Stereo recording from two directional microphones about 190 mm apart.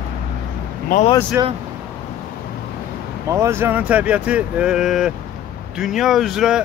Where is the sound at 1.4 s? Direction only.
15° right (ahead or behind).